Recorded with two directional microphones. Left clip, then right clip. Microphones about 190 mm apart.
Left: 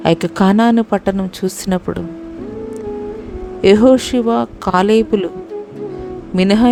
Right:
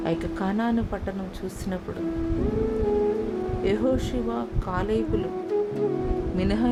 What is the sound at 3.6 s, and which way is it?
Speech, 55° left (ahead or behind).